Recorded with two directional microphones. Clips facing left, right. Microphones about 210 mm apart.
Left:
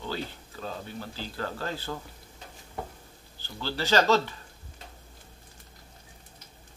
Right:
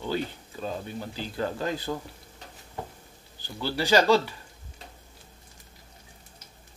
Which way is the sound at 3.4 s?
15° right (ahead or behind).